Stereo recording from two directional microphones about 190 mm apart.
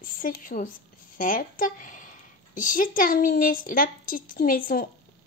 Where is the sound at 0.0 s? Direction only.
45° left (ahead or behind).